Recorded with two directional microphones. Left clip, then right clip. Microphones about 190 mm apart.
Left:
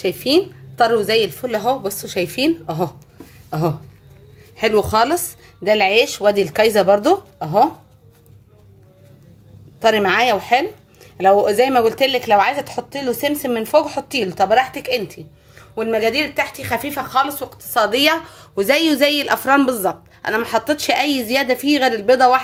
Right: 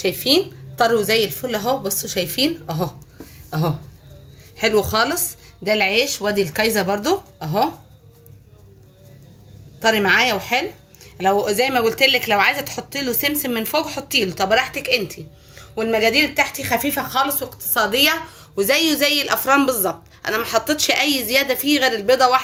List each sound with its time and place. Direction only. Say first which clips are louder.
0.0 s a woman's voice: left 1 dB; 35° left (ahead or behind)
9.8 s speech: left 1 dB; 45° left (ahead or behind)